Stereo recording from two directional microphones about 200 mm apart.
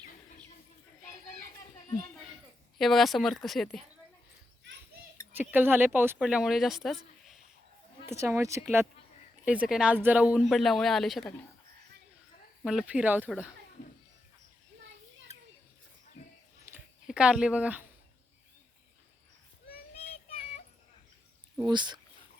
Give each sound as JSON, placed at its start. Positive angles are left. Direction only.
{"t": 2.7, "sound": "speech", "side_deg": 0}
{"t": 5.4, "sound": "speech", "side_deg": -10}
{"t": 8.0, "sound": "speech", "side_deg": -15}
{"t": 12.6, "sound": "speech", "side_deg": -5}
{"t": 16.6, "sound": "a sound", "side_deg": -10}
{"t": 19.9, "sound": "child singing", "side_deg": 30}
{"t": 21.6, "sound": "speech", "side_deg": -20}